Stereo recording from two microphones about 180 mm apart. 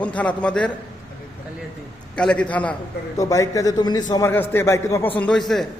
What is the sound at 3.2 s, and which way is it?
A man's voice, 20° left (ahead or behind).